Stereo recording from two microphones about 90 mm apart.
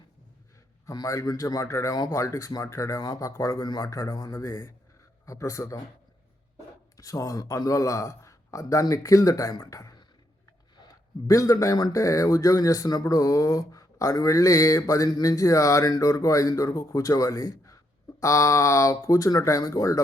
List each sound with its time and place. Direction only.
0.9 s speech: 40° left (ahead or behind)
6.9 s speech: 40° left (ahead or behind)
11.3 s speech: 40° left (ahead or behind)